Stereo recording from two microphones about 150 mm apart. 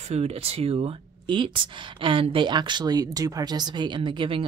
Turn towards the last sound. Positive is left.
turn(degrees=-35)  # may be behind; listen again after turning